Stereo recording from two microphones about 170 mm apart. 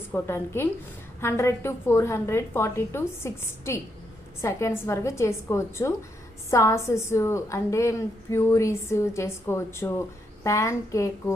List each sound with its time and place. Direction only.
0.1 s a woman's voice: 15° left (ahead or behind)